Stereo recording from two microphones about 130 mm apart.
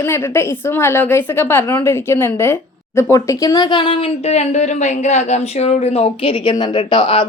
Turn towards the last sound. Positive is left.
turn(degrees=40)  # may be behind; listen again after turning